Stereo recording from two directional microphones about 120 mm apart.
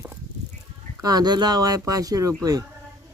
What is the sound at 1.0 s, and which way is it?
Speech, 35° right (ahead or behind).